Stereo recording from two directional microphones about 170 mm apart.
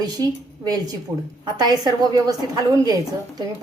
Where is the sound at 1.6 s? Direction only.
20° right (ahead or behind).